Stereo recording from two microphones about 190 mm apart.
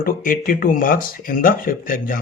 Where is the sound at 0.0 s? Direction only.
50° left (ahead or behind).